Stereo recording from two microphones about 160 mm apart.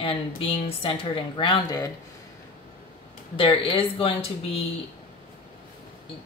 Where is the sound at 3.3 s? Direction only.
35° left (ahead or behind).